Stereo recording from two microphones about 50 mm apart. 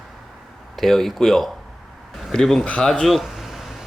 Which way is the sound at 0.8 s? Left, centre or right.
Centre.